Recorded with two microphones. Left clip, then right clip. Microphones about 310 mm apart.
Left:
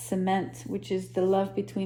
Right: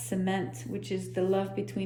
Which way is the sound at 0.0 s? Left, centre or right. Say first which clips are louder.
Left 4 dB; centre.